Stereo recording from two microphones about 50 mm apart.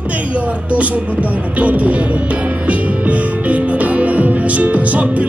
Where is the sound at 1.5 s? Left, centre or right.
Right.